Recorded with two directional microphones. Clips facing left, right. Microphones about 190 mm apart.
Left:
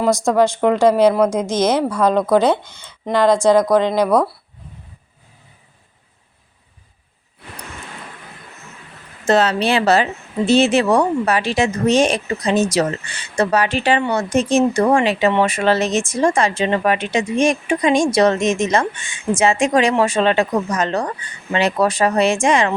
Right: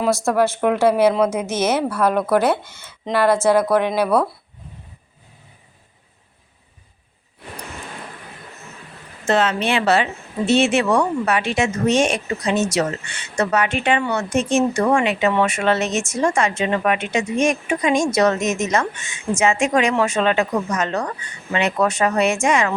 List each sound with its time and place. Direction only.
0.9 s speech: 10° right (ahead or behind)
1.5 s speech: 15° left (ahead or behind)
3.8 s speech: 10° right (ahead or behind)
9.2 s a woman's voice: 40° left (ahead or behind)